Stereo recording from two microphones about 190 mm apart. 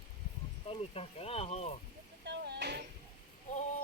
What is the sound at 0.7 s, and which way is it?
Speech, 30° left (ahead or behind).